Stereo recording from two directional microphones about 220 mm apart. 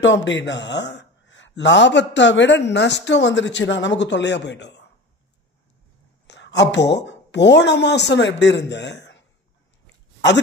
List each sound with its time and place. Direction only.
0.0 s a man's voice: 55° left (ahead or behind)
6.2 s a woman's voice: 50° left (ahead or behind)